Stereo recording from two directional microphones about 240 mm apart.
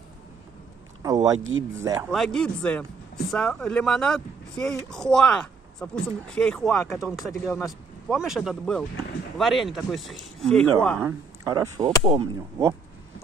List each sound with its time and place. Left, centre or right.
1.0 s speech: centre
2.0 s speech: centre
11.1 s speech: centre